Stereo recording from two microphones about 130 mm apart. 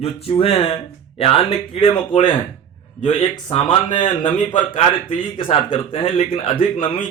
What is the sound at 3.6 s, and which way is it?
Speech, 40° left (ahead or behind).